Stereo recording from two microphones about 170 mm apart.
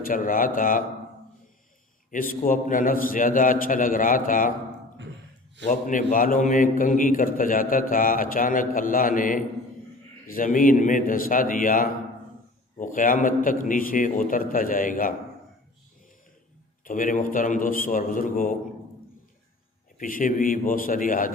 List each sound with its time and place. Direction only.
0.0 s a man's voice: 55° left (ahead or behind)
2.0 s a man's voice: 55° left (ahead or behind)
5.6 s a man's voice: 50° left (ahead or behind)
16.8 s a man's voice: 50° left (ahead or behind)
20.0 s a man's voice: 55° left (ahead or behind)